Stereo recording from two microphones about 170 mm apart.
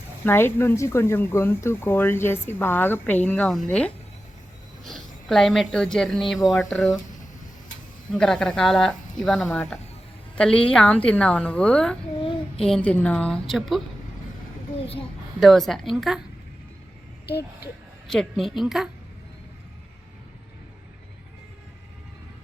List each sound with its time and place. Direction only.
0.3 s speech: 15° left (ahead or behind)
8.1 s speech: 5° left (ahead or behind)
12.2 s child singing: 30° left (ahead or behind)
12.6 s speech: 5° left (ahead or behind)
15.4 s speech: centre (ahead or behind)
18.1 s speech: centre (ahead or behind)